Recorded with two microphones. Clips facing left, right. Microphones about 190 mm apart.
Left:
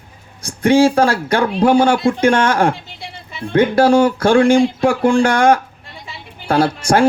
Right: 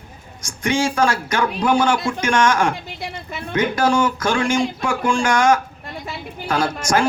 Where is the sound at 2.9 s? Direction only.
50° right (ahead or behind).